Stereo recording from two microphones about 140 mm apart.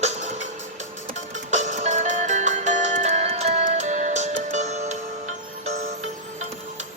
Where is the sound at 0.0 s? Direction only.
55° right (ahead or behind).